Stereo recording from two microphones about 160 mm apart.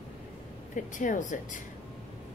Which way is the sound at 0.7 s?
50° left (ahead or behind).